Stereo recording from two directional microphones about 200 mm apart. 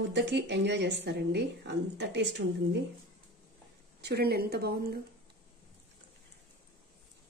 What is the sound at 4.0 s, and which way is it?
Speech, 55° right (ahead or behind).